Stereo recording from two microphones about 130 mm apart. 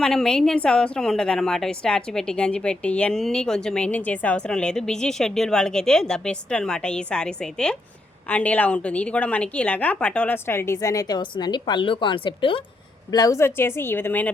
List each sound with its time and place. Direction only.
0.0 s a woman's voice: 5° left (ahead or behind); by 12.6 s 40° left (ahead or behind)
13.1 s a woman's voice: 30° left (ahead or behind)